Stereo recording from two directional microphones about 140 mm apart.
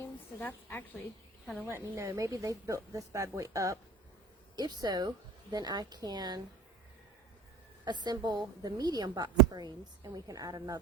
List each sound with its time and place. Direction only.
0.0 s a woman's voice: 15° left (ahead or behind)
1.5 s speech: 15° right (ahead or behind)
7.9 s speech: 30° right (ahead or behind)